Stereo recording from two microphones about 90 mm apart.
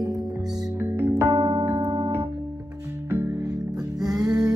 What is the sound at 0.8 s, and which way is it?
Music, 25° right (ahead or behind).